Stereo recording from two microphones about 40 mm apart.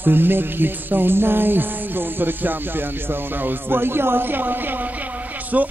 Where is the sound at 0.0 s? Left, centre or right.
Right.